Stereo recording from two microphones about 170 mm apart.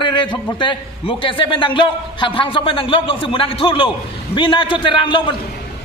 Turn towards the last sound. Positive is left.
turn(degrees=30)  # may be behind; listen again after turning